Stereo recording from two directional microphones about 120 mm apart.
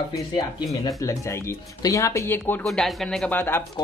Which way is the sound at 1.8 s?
30° left (ahead or behind).